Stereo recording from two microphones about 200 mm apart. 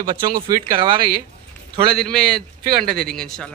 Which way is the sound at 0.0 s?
20° right (ahead or behind).